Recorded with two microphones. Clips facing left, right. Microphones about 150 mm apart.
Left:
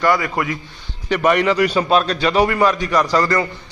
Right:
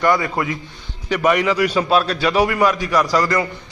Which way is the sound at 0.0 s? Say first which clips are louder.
Even; 25° right (ahead or behind).